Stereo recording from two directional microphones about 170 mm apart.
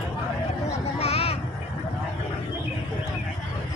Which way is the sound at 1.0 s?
35° left (ahead or behind).